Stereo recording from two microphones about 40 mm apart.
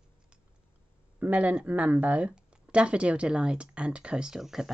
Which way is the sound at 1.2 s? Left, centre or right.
Right.